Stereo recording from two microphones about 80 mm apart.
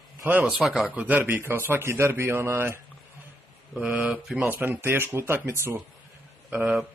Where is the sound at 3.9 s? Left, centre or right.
Right.